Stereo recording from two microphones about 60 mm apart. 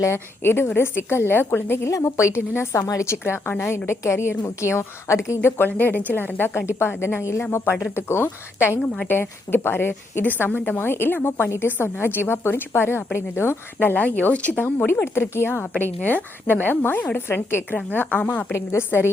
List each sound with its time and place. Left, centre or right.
0.0 s a woman's voice: left
1.9 s a woman's voice: left
3.1 s a woman's voice: left
15.6 s a woman's voice: left
17.2 s a woman's voice: left
18.5 s a woman's voice: left